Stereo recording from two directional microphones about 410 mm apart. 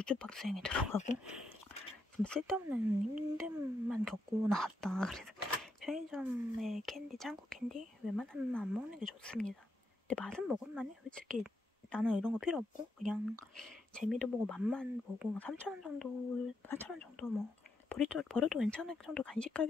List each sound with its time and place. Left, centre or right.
0.0 s speech: centre
1.0 s a sound: centre
2.2 s speech: centre